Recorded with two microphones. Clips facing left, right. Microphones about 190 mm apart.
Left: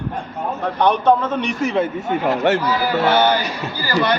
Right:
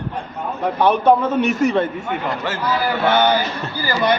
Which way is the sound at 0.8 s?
10° right (ahead or behind).